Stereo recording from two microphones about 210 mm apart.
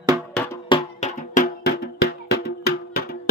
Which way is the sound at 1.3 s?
40° left (ahead or behind).